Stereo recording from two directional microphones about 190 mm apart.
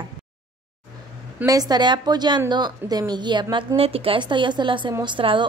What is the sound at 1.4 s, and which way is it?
A woman's voice, 20° right (ahead or behind).